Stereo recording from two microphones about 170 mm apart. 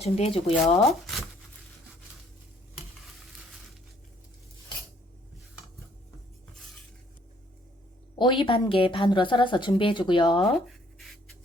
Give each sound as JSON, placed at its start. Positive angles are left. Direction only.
{"t": 0.0, "sound": "speech", "side_deg": 35}
{"t": 0.8, "sound": "speech", "side_deg": 0}
{"t": 8.2, "sound": "a woman's voice", "side_deg": 30}